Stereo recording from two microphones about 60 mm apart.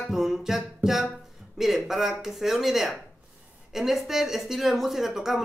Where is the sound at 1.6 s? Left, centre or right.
Centre.